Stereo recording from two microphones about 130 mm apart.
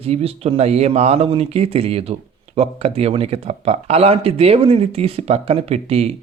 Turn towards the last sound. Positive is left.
turn(degrees=-55)  # may be behind; listen again after turning